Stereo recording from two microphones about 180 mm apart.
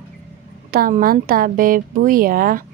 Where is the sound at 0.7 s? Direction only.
50° right (ahead or behind).